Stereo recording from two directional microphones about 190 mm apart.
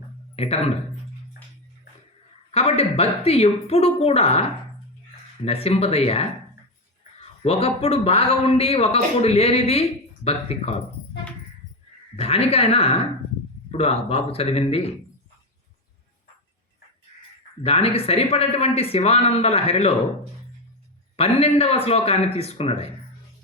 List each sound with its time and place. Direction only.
0.3 s speech: 35° left (ahead or behind)
2.5 s speech: 30° left (ahead or behind)
5.5 s speech: 30° left (ahead or behind)
7.4 s speech: 30° left (ahead or behind)
12.1 s speech: 30° left (ahead or behind)
17.6 s speech: 30° left (ahead or behind)
21.2 s speech: 30° left (ahead or behind)